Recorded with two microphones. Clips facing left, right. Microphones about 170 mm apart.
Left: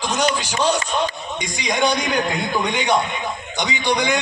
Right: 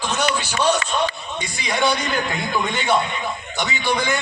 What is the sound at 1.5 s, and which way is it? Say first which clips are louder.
A man's voice: left 1 dB; 15° left (ahead or behind).